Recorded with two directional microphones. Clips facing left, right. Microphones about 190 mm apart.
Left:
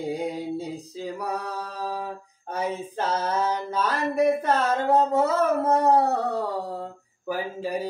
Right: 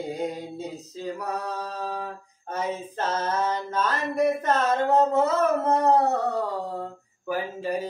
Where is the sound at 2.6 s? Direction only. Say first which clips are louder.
Left 1 dB; 10° left (ahead or behind).